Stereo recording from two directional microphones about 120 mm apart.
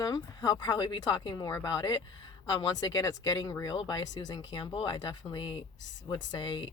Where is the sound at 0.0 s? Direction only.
30° left (ahead or behind).